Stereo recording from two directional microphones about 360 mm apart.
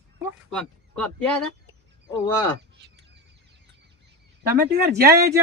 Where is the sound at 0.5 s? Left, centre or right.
Centre.